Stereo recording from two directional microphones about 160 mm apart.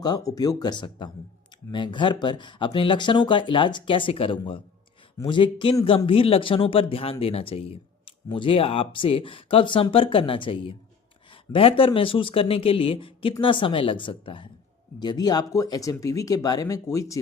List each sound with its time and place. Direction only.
0.0 s speech: 25° left (ahead or behind)